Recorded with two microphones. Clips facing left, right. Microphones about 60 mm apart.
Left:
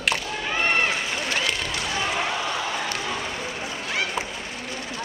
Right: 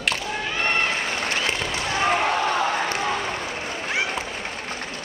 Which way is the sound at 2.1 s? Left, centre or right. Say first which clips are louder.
Right 9 dB; right.